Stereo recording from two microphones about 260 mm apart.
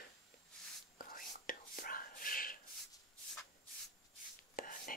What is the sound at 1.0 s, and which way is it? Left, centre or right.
Whispering, left.